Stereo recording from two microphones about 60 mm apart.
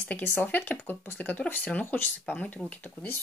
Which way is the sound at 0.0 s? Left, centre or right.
Left.